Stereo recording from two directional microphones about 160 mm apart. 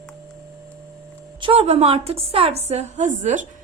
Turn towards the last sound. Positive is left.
turn(degrees=-50)  # may be behind; listen again after turning